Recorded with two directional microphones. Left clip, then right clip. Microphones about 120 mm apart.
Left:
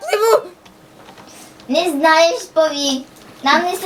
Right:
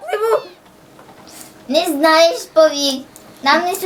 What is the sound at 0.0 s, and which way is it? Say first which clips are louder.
Babbling: left 3 dB; 35° left (ahead or behind).